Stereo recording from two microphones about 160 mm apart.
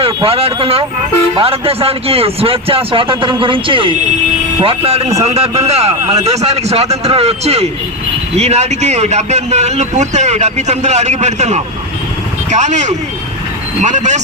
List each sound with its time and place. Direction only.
0.0 s a man's voice: 35° right (ahead or behind)